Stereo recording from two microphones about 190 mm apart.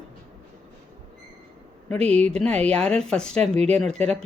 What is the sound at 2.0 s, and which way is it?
Speech, 35° right (ahead or behind).